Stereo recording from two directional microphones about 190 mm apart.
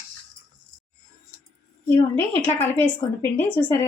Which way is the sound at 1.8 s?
10° left (ahead or behind).